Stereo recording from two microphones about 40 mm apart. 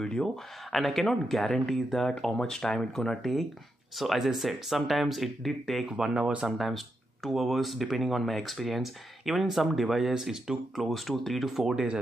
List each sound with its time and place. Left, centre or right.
0.0 s speech: centre
0.7 s speech: centre
4.0 s speech: centre
5.9 s speech: centre
6.4 s speech: centre
10.1 s speech: centre
10.8 s speech: centre
11.7 s speech: right